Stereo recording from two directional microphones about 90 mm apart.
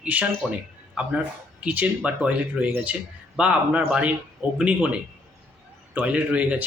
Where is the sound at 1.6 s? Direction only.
15° right (ahead or behind).